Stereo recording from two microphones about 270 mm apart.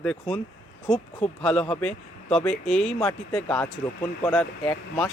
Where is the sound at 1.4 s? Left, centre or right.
Centre.